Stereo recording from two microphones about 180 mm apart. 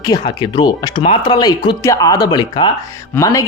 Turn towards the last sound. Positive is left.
turn(degrees=20)  # may be behind; listen again after turning